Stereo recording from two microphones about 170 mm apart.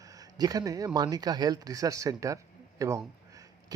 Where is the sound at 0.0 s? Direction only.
20° right (ahead or behind).